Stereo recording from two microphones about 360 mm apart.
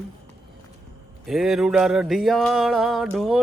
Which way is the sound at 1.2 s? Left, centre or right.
Centre.